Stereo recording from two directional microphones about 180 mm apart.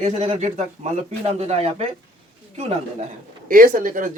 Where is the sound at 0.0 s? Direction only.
40° right (ahead or behind).